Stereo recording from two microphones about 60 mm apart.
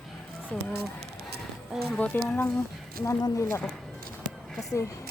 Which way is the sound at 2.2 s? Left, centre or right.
Left.